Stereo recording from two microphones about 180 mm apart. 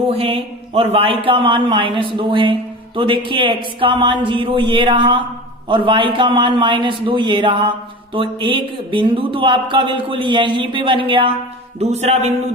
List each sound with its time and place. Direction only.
0.1 s speech: 30° right (ahead or behind)